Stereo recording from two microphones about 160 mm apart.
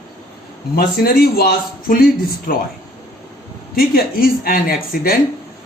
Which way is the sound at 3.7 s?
65° left (ahead or behind).